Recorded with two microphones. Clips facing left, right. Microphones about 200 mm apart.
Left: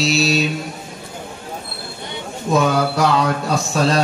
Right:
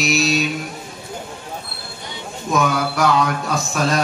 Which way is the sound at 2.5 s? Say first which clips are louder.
Left 3 dB; 30° left (ahead or behind).